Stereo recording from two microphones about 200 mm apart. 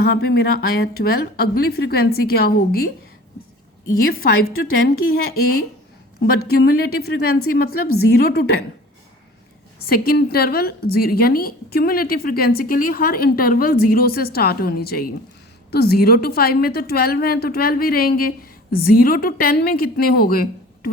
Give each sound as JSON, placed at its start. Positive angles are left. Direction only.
{"t": 0.0, "sound": "a woman's voice", "side_deg": 50}
{"t": 4.0, "sound": "a woman's voice", "side_deg": 50}
{"t": 9.9, "sound": "a woman's voice", "side_deg": 50}